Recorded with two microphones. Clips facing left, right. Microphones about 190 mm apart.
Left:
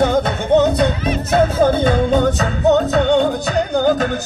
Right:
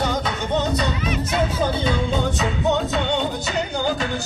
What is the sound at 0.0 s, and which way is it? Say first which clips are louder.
Music: left 8 dB; 55° left (ahead or behind).